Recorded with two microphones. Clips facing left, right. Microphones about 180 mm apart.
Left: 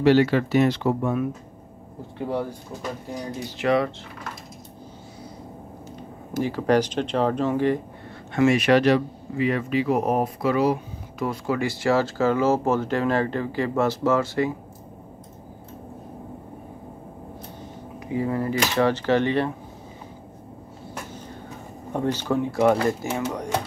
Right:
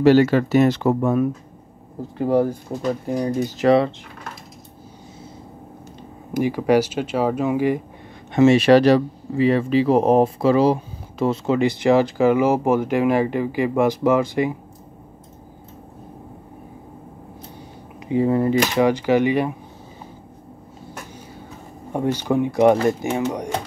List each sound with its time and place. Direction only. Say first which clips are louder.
0.0 s speech: right 4 dB; 45° right (ahead or behind)
6.3 s speech: right 3 dB; 15° right (ahead or behind)
8.3 s speech: right 5 dB; 25° right (ahead or behind)
18.0 s speech: right 7 dB; 25° right (ahead or behind)
18.8 s speech: right 1 dB; 10° right (ahead or behind)
21.9 s speech: right 3 dB; 15° right (ahead or behind)